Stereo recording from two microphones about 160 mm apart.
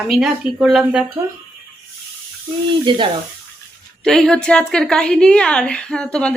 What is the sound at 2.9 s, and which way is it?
Speech, 30° right (ahead or behind).